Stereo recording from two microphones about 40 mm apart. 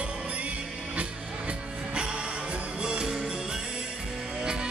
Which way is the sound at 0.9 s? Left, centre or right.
Right.